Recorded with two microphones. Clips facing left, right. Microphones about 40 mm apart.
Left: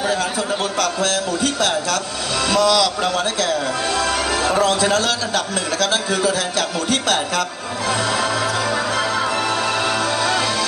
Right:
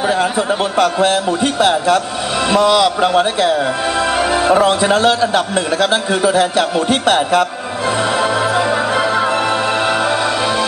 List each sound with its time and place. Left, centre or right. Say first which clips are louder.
0.0 s a man's voice: right 5 dB; right
8.2 s music: right 5 dB; right